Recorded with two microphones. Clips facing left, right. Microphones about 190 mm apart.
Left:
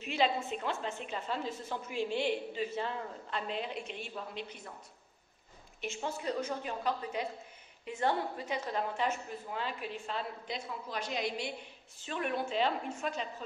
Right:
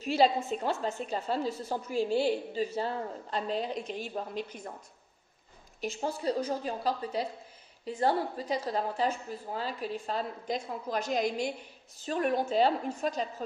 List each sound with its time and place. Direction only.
0.0 s a woman's voice: 40° right (ahead or behind)
5.8 s a woman's voice: 40° right (ahead or behind)